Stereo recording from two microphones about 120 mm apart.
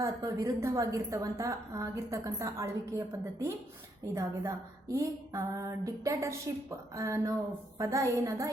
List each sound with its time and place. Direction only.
0.0 s speech: 30° right (ahead or behind)
4.1 s speech: 25° right (ahead or behind)